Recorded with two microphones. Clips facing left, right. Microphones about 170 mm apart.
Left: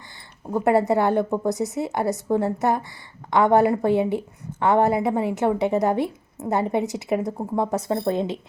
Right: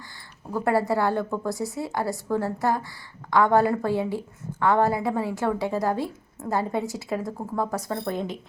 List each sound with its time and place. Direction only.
0.5 s a woman's voice: 20° left (ahead or behind)